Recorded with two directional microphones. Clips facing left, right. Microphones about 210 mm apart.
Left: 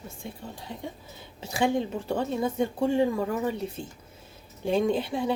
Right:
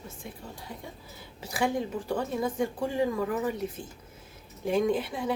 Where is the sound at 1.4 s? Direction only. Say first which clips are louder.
Left 3 dB; 25° left (ahead or behind).